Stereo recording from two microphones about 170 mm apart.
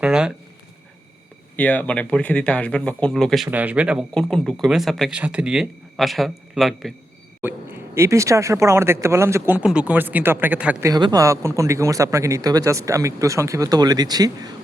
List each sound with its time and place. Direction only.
0.0 s speech: 5° right (ahead or behind)
1.5 s speech: 10° left (ahead or behind); by 4.0 s 5° right (ahead or behind)
4.1 s speech: 5° left (ahead or behind)
7.4 s speech: 15° right (ahead or behind)